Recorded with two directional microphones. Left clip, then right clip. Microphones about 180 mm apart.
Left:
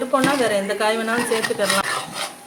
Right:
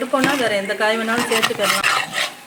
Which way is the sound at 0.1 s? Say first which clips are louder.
Even; 5° right (ahead or behind).